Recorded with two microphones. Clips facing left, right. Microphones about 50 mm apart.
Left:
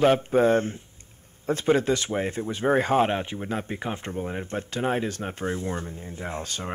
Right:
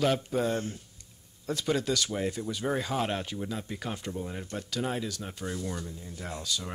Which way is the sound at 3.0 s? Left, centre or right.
Left.